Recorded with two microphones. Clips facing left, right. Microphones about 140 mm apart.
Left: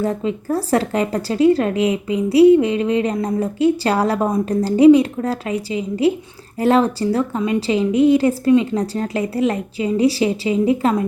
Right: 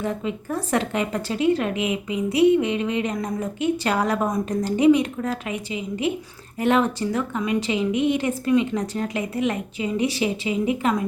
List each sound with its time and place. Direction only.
0.0 s a woman's voice: 35° left (ahead or behind)